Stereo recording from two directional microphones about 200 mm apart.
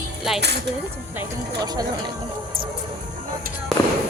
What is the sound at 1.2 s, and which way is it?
Speech, 20° right (ahead or behind).